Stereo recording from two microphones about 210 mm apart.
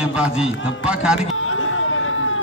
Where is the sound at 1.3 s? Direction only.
75° left (ahead or behind).